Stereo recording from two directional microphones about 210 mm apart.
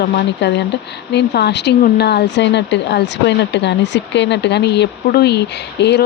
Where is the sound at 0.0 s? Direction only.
55° left (ahead or behind).